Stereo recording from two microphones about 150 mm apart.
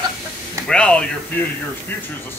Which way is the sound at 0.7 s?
5° left (ahead or behind).